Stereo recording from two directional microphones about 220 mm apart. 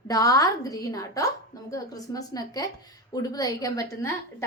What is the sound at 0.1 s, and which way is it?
A woman's voice, 15° left (ahead or behind).